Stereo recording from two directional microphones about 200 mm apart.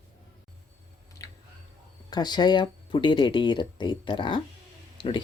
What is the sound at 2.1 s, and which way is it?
Speech, 20° left (ahead or behind).